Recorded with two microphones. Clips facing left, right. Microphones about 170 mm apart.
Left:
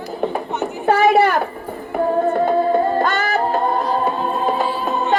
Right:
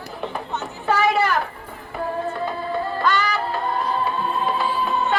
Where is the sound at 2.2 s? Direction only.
50° left (ahead or behind).